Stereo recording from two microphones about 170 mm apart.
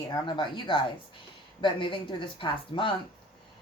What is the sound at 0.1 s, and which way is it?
Speech, 25° left (ahead or behind).